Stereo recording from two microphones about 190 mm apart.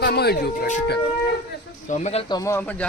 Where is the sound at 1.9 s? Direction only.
35° left (ahead or behind).